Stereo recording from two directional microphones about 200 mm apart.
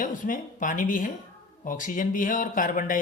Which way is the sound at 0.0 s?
40° left (ahead or behind).